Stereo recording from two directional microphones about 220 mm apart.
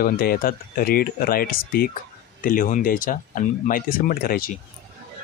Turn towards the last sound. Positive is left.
turn(degrees=40)  # may be behind; listen again after turning